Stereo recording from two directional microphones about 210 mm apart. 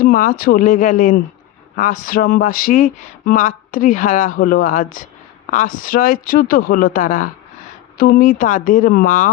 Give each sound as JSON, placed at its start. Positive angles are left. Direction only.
{"t": 0.0, "sound": "speech", "side_deg": 40}